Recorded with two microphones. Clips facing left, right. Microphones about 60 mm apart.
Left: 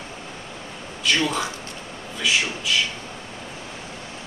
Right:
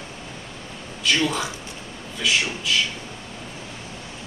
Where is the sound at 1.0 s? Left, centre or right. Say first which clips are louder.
Even; centre.